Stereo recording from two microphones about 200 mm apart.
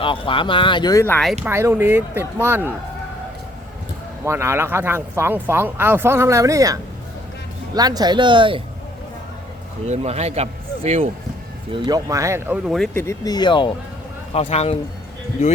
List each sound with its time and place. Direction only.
0.0 s speech: 25° left (ahead or behind)
1.5 s speech: 10° right (ahead or behind)
4.2 s speech: 15° right (ahead or behind)
7.8 s speech: 20° right (ahead or behind)
9.8 s a man's voice: 35° right (ahead or behind)
11.7 s speech: 20° right (ahead or behind); by 12.9 s centre (ahead or behind)
12.9 s speech: 15° left (ahead or behind); by 14.8 s 30° left (ahead or behind)